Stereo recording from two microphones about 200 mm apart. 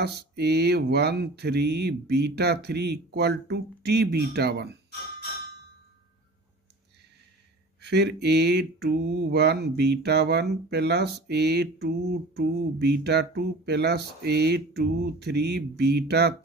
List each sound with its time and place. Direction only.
0.0 s mantra: 55° right (ahead or behind)
7.8 s mantra: 55° right (ahead or behind)